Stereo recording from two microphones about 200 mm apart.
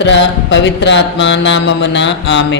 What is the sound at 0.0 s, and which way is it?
A man's voice, 65° left (ahead or behind).